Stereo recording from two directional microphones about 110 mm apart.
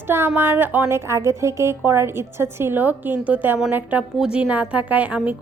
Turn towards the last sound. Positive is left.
turn(degrees=-10)  # may be behind; listen again after turning